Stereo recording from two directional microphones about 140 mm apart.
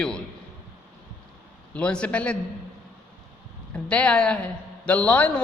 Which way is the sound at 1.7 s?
5° left (ahead or behind).